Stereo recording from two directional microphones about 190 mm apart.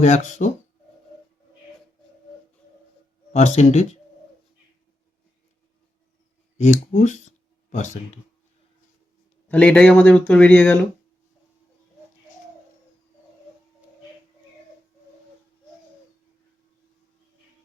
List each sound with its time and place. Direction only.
0.0 s speech: 40° left (ahead or behind)
3.3 s speech: 35° left (ahead or behind)
6.6 s speech: 40° left (ahead or behind)
9.5 s speech: 5° left (ahead or behind)